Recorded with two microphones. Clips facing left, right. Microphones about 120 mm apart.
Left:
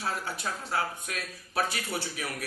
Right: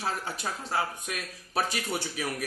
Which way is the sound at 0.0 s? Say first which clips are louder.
Right 1 dB; 25° right (ahead or behind).